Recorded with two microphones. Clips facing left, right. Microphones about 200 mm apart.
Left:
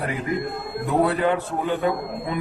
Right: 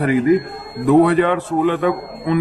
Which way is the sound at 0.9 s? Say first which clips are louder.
Right 8 dB; 80° right.